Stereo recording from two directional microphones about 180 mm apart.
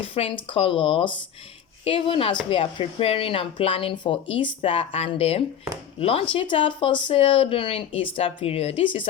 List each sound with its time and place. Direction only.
0.0 s a woman's voice: 30° left (ahead or behind)